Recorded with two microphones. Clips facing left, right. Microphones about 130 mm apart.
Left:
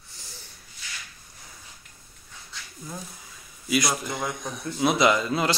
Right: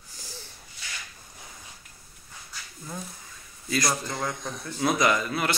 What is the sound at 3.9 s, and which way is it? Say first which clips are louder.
A man's voice: even; 15° left (ahead or behind).